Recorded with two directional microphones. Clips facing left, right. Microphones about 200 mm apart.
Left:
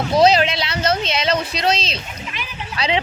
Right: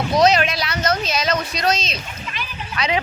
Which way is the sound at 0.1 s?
30° left (ahead or behind).